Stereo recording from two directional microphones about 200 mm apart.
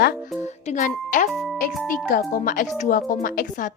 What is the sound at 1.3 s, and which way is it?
Music, centre (ahead or behind).